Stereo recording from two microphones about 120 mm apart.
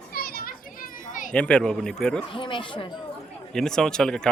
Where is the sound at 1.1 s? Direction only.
90° left.